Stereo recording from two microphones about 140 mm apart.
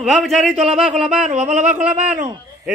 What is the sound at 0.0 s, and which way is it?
A man's voice, centre (ahead or behind).